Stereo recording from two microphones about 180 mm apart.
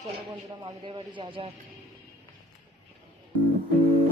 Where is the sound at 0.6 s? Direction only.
30° right (ahead or behind).